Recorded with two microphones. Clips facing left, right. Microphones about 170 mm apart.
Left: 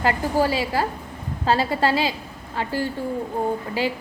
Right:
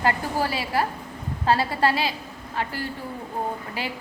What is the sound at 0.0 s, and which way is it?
A woman's voice, 25° left (ahead or behind).